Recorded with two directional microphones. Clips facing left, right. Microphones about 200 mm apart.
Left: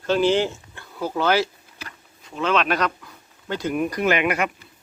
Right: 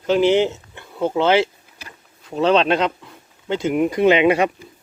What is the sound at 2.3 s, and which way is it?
Speech, 35° right (ahead or behind).